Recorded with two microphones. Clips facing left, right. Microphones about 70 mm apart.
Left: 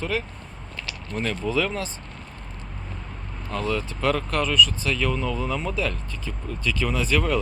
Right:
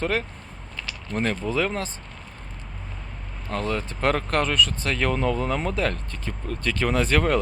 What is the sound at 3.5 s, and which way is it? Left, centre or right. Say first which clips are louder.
Speech: even; right.